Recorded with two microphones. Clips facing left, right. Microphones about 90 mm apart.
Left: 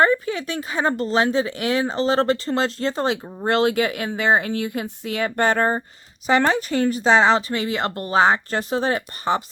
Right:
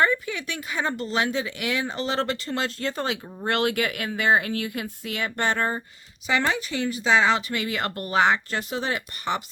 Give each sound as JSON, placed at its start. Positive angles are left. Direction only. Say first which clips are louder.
{"t": 0.0, "sound": "speech", "louder": "left 5 dB", "side_deg": 35}